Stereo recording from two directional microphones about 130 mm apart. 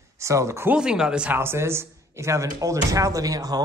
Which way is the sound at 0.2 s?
25° right (ahead or behind).